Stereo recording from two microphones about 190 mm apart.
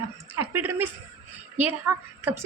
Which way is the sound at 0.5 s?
10° right (ahead or behind).